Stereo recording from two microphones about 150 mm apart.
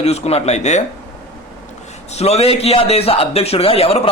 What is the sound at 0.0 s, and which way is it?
Speech, 45° left (ahead or behind).